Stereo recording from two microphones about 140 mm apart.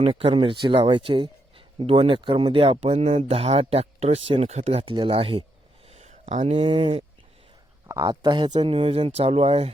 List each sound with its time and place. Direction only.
0.0 s speech: 40° right (ahead or behind)
5.9 s a sound: 55° right (ahead or behind)
6.5 s speech: 40° right (ahead or behind)
8.0 s speech: 35° right (ahead or behind)